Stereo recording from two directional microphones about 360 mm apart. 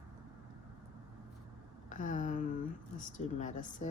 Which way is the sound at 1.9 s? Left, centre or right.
Left.